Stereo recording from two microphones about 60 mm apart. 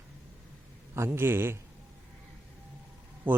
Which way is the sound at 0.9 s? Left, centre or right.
Right.